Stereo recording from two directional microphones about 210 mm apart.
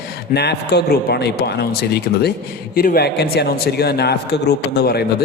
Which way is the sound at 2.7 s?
45° left (ahead or behind).